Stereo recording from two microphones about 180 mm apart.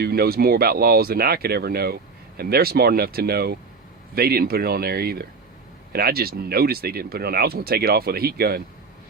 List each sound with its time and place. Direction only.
0.0 s speech: 60° right (ahead or behind)